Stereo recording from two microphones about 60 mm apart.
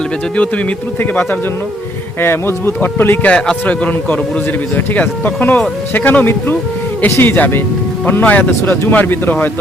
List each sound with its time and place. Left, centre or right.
2.2 s speech: left
3.2 s a man's voice: centre